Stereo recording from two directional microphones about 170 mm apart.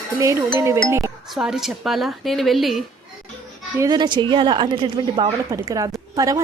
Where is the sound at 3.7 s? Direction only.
25° right (ahead or behind).